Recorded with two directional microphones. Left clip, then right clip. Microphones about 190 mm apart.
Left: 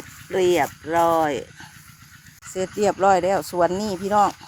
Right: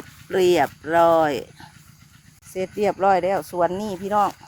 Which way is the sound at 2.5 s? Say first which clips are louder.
Left 1 dB; centre (ahead or behind).